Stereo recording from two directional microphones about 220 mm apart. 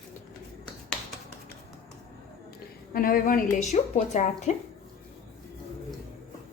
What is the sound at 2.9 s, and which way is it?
A woman's voice, 40° left (ahead or behind).